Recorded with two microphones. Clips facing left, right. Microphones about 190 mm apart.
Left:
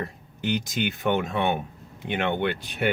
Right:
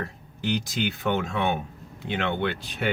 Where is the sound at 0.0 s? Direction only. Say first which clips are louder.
Left 1 dB; 20° left (ahead or behind).